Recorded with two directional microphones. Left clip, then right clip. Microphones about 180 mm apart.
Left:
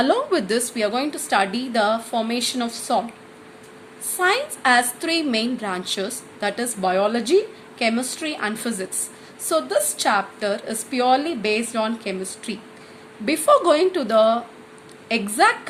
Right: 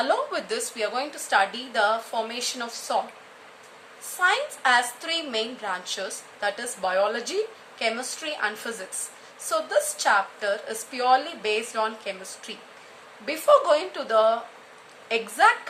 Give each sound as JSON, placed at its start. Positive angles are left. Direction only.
{"t": 0.0, "sound": "a woman's voice", "side_deg": 25}
{"t": 4.2, "sound": "a woman's voice", "side_deg": 25}